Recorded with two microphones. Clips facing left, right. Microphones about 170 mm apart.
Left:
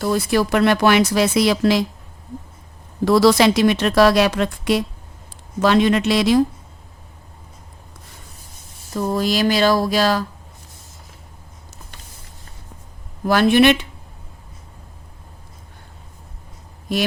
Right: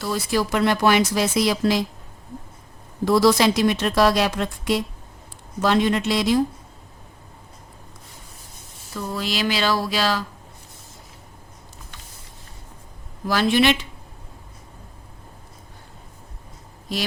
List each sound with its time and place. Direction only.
0.0 s speech: 60° left (ahead or behind); by 1.8 s 75° left (ahead or behind)
3.0 s speech: 75° left (ahead or behind)
5.6 s a woman's voice: 90° left
8.9 s speech: 40° left (ahead or behind)
13.2 s speech: 55° left (ahead or behind)
16.9 s speech: 55° left (ahead or behind)